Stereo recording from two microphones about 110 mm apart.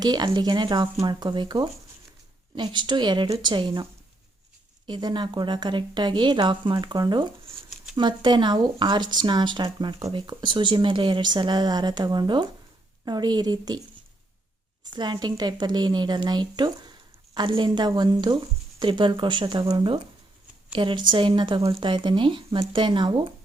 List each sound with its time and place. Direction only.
0.0 s a woman's voice: 40° right (ahead or behind)
4.9 s a woman's voice: 40° right (ahead or behind)
14.8 s a woman's voice: 40° right (ahead or behind)